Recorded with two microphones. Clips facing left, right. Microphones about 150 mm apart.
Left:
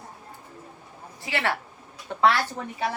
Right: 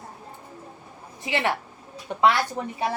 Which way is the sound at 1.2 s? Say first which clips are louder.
Right 2 dB; 20° right (ahead or behind).